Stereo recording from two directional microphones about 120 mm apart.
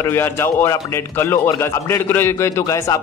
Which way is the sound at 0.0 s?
20° left (ahead or behind).